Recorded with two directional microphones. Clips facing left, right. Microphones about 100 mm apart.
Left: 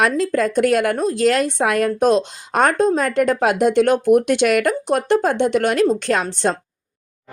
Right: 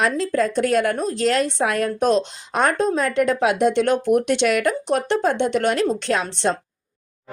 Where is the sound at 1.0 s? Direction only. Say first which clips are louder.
Left 3 dB; 45° left (ahead or behind).